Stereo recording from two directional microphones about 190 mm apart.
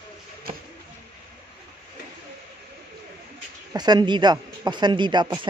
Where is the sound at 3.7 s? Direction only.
20° right (ahead or behind).